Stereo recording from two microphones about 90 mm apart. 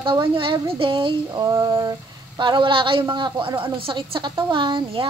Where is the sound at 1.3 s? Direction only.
50° right (ahead or behind); by 3.0 s 70° right (ahead or behind).